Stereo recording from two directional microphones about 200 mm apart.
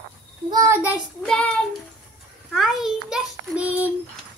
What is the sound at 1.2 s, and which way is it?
A child's voice, 5° left (ahead or behind).